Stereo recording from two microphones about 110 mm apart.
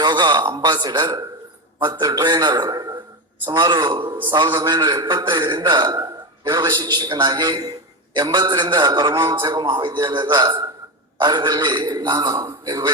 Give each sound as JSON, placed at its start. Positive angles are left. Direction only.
{"t": 0.0, "sound": "a man's voice", "side_deg": -40}